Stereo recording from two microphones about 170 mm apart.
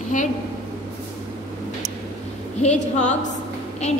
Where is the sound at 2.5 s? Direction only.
40° left (ahead or behind).